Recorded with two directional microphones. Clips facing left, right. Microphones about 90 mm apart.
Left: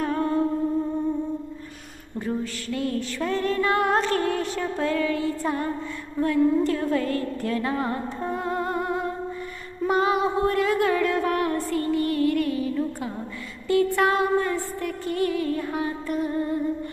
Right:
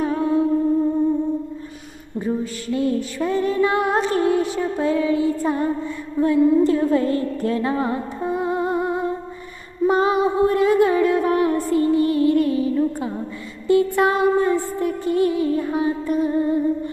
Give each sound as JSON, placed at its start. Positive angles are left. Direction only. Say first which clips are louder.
{"t": 0.0, "sound": "humming", "louder": "right 4 dB", "side_deg": -5}
{"t": 2.1, "sound": "music", "louder": "right 4 dB", "side_deg": -15}
{"t": 6.1, "sound": "a sound", "louder": "right 5 dB", "side_deg": -15}
{"t": 9.8, "sound": "music", "louder": "right 4 dB", "side_deg": -25}